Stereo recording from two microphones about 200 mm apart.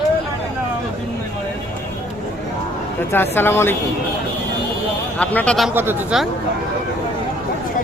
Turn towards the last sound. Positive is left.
turn(degrees=-5)  # may be behind; listen again after turning